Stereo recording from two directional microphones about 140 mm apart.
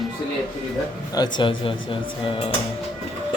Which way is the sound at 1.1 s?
30° left (ahead or behind).